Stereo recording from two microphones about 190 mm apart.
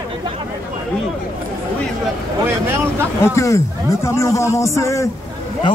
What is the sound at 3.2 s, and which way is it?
A man's voice, 15° left (ahead or behind).